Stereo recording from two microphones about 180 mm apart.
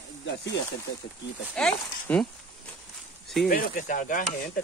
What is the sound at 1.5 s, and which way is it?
Speech, 5° left (ahead or behind).